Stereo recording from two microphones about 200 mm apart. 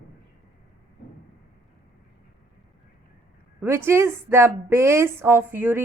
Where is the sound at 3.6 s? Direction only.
10° right (ahead or behind).